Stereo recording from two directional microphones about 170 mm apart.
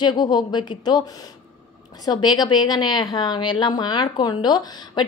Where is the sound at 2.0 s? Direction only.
25° left (ahead or behind).